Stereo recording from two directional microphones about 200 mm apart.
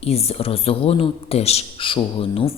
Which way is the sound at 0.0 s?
30° left (ahead or behind).